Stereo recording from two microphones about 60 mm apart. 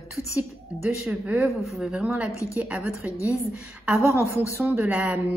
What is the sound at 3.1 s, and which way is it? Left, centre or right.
Speech, left.